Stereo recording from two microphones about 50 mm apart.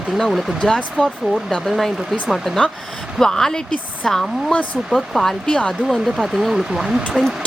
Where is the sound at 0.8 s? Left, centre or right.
Left.